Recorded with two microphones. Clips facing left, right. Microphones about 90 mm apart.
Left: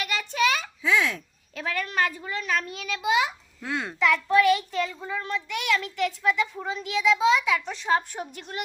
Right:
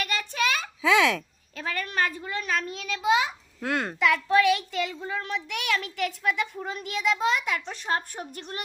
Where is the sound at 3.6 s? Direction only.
55° right (ahead or behind).